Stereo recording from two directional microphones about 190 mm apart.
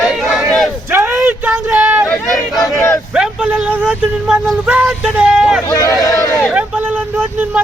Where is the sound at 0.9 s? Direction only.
10° right (ahead or behind).